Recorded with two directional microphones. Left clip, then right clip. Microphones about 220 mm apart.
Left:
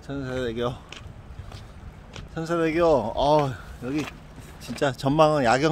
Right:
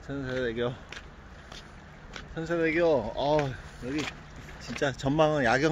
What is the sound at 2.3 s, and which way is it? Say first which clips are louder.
Speech: left 3 dB; 15° left (ahead or behind).